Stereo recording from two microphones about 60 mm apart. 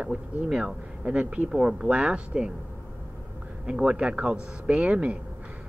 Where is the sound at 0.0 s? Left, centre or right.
Centre.